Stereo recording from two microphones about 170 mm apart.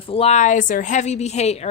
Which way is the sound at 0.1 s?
35° left (ahead or behind).